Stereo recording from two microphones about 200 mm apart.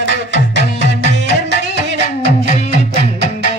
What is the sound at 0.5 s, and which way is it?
Music, 65° right (ahead or behind).